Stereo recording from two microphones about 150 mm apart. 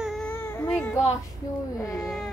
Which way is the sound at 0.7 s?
10° left (ahead or behind).